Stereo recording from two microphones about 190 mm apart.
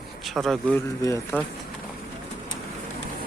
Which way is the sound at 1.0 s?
15° left (ahead or behind).